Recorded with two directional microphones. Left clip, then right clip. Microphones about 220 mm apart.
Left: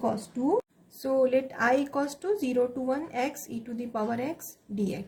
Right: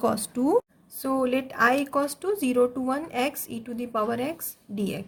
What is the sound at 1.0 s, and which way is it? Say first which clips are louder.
A woman's voice: left 1 dB; 30° right (ahead or behind).